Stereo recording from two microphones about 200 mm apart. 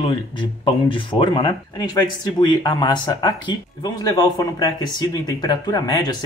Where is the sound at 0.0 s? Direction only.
25° left (ahead or behind).